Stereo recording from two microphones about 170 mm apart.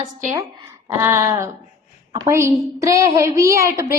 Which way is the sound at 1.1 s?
15° right (ahead or behind).